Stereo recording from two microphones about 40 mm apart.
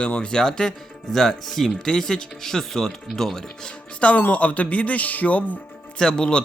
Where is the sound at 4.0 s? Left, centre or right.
Left.